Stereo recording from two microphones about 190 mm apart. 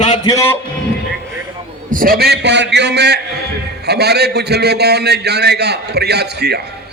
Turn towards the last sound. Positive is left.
turn(degrees=-60)  # may be behind; listen again after turning